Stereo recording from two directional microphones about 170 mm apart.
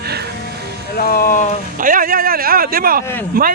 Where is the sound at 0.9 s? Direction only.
55° left (ahead or behind).